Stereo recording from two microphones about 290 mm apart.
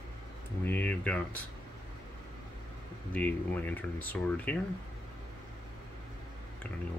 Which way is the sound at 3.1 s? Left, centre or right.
Centre.